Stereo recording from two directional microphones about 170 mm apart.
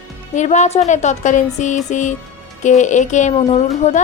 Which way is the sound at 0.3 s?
45° left (ahead or behind).